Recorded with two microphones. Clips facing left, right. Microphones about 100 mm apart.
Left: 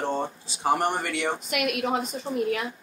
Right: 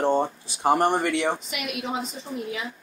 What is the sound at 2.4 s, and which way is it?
Speech, 60° left (ahead or behind).